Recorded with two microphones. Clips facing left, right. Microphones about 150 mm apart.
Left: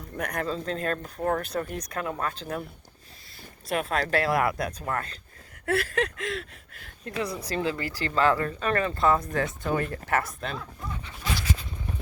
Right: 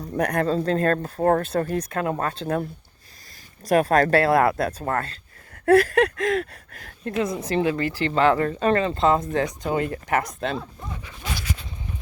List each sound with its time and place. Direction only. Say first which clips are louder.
0.2 s speech: right 8 dB; 35° right (ahead or behind)
3.7 s speech: right 9 dB; 40° right (ahead or behind)
7.2 s speech: right 6 dB; 20° right (ahead or behind)